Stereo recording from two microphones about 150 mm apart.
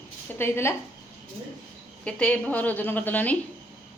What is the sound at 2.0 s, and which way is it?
A woman's voice, 10° left (ahead or behind).